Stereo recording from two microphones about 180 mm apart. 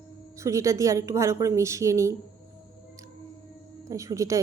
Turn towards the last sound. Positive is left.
turn(degrees=-20)  # may be behind; listen again after turning